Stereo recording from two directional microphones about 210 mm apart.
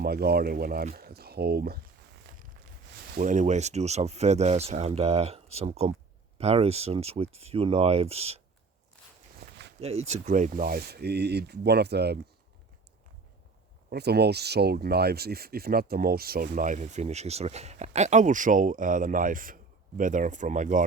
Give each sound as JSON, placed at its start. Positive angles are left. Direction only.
{"t": 0.0, "sound": "speech", "side_deg": -50}
{"t": 2.3, "sound": "a sound", "side_deg": -55}
{"t": 3.2, "sound": "speech", "side_deg": -35}
{"t": 9.4, "sound": "walk", "side_deg": -50}
{"t": 9.8, "sound": "speech", "side_deg": -30}
{"t": 13.9, "sound": "speech", "side_deg": -50}